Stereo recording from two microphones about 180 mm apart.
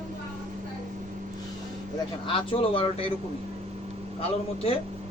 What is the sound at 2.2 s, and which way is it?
Speech, 30° left (ahead or behind).